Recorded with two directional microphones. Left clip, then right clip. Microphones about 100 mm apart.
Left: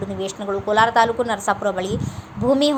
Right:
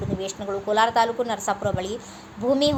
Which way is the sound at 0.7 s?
35° left (ahead or behind).